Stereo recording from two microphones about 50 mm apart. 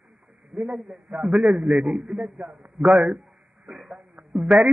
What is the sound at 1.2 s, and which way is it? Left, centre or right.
Speech, centre.